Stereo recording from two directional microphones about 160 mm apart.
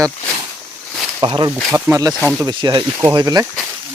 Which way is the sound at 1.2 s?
30° right (ahead or behind).